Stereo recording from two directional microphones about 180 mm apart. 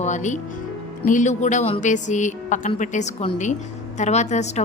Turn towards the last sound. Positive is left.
turn(degrees=40)  # may be behind; listen again after turning